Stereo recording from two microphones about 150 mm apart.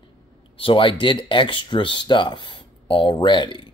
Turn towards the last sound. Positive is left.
turn(degrees=30)  # may be behind; listen again after turning